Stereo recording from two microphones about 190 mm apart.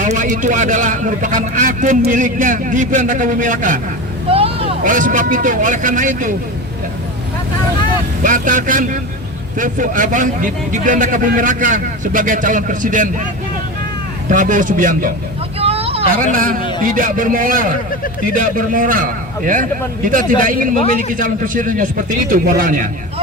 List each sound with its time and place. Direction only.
0.0 s a man's voice: 40° right (ahead or behind)
4.3 s vehicle: 30° right (ahead or behind)
4.8 s a man's voice: 45° right (ahead or behind)
8.2 s a man's voice: 45° right (ahead or behind)
14.3 s a man's voice: 45° right (ahead or behind)
15.5 s vehicle: 30° right (ahead or behind)
16.3 s a man's voice: 45° right (ahead or behind)